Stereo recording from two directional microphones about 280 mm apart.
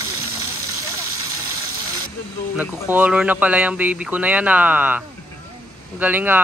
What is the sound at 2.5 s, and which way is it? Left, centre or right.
Speech, centre.